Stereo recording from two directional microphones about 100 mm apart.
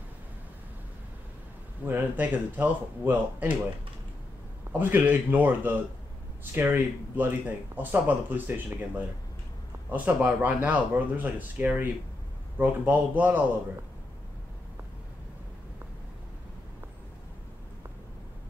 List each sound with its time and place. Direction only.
1.9 s speech: 20° right (ahead or behind)
4.7 s speech: 20° right (ahead or behind)
9.8 s speech: 15° right (ahead or behind)